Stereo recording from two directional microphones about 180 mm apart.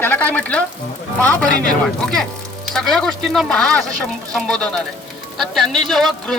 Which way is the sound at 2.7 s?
Centre (ahead or behind).